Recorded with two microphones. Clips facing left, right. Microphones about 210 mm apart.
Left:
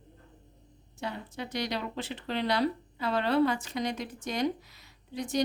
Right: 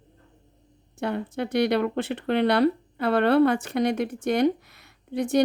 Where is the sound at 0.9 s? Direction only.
60° right (ahead or behind).